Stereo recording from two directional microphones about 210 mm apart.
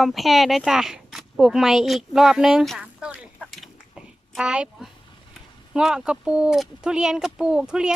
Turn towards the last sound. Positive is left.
turn(degrees=-5)  # may be behind; listen again after turning